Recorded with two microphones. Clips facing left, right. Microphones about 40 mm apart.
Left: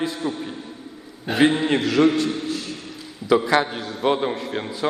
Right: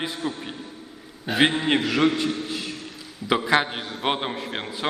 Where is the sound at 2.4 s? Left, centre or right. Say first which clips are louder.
Left 3 dB; centre.